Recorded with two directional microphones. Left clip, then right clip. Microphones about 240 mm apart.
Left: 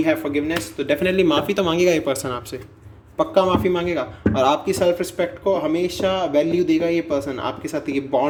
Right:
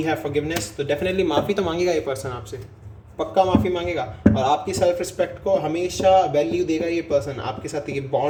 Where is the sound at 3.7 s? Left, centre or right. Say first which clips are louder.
Left 2 dB; left.